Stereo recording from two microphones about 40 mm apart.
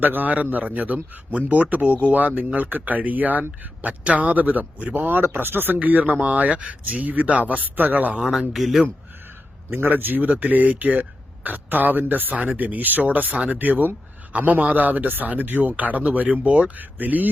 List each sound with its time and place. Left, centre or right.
0.0 s a man's voice: right
5.8 s a man's voice: right
6.5 s a man's voice: right
6.8 s a man's voice: right
8.5 s speech: centre
9.9 s a man's voice: right
13.3 s a man's voice: right
13.6 s a man's voice: right
16.7 s a man's voice: right